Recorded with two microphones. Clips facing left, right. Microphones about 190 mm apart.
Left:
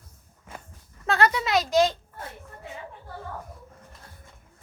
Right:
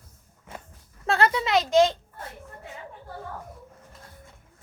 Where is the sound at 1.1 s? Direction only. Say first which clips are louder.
Even; 30° right (ahead or behind).